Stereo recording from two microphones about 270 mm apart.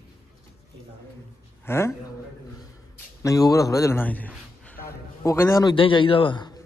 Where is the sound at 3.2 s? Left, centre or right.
Centre.